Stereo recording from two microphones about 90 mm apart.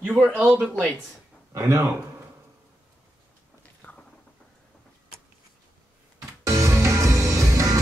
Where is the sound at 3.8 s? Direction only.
20° left (ahead or behind).